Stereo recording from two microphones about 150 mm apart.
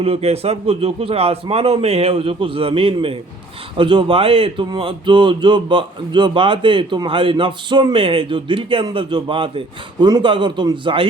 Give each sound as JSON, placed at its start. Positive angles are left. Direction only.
{"t": 0.0, "sound": "speech", "side_deg": -40}